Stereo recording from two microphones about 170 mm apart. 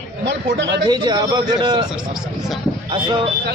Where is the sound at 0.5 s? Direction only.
90° right.